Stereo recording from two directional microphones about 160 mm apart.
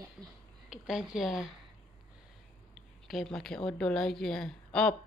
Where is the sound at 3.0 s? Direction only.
Centre (ahead or behind).